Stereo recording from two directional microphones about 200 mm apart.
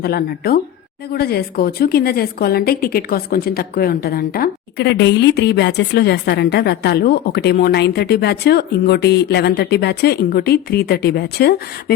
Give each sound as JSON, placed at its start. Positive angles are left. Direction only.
{"t": 0.0, "sound": "a woman's voice", "side_deg": 50}